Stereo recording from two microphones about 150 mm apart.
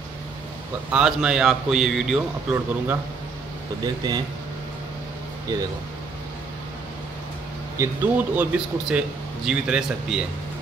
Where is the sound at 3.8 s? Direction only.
25° right (ahead or behind).